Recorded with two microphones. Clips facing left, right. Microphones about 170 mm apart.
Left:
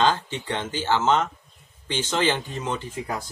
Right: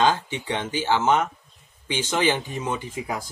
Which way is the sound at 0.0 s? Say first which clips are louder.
Right 1 dB; 15° right (ahead or behind).